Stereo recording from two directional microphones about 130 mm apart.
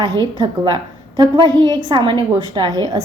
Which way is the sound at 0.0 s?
30° right (ahead or behind).